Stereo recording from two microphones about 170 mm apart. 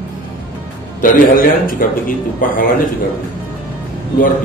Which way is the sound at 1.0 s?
55° left (ahead or behind).